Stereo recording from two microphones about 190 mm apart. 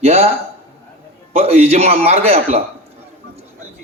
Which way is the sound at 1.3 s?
35° right (ahead or behind).